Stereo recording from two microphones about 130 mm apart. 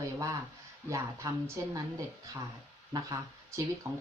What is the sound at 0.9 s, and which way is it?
Speech, 25° right (ahead or behind).